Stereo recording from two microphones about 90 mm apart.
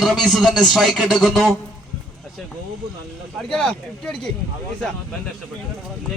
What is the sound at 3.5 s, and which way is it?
Speech, 10° left (ahead or behind).